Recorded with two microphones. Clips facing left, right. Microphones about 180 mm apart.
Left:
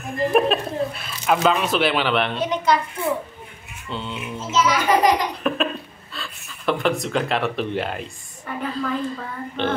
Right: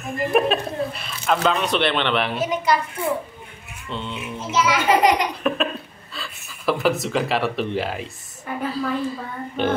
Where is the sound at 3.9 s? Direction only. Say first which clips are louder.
Even; centre (ahead or behind).